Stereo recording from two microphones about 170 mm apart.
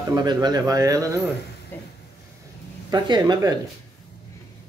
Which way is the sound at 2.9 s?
25° right (ahead or behind).